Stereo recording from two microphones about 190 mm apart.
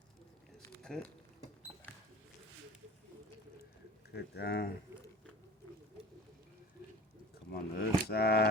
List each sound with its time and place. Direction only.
0.9 s speech: 5° left (ahead or behind)
4.1 s speech: 60° left (ahead or behind)
7.5 s speech: 55° left (ahead or behind)